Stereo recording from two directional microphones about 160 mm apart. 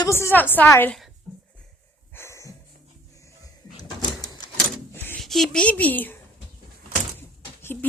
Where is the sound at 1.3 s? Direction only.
Centre (ahead or behind).